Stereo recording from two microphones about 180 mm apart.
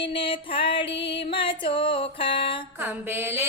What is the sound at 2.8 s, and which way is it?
Mantra, 10° right (ahead or behind).